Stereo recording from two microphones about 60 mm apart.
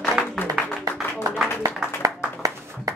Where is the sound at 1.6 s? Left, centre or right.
Right.